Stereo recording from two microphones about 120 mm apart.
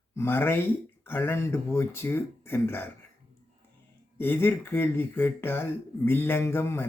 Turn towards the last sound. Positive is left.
turn(degrees=20)  # may be behind; listen again after turning